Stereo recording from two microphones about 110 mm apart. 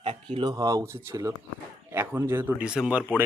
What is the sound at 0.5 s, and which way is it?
Speech, 30° right (ahead or behind).